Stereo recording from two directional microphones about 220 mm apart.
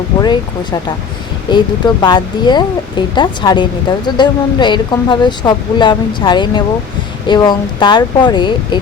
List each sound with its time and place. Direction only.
0.2 s speech: 20° left (ahead or behind)